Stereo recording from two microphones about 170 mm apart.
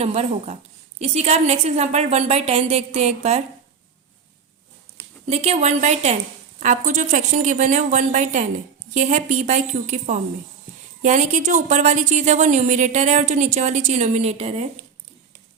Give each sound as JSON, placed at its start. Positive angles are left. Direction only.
{"t": 0.0, "sound": "a woman's voice", "side_deg": -35}
{"t": 5.3, "sound": "a woman's voice", "side_deg": -40}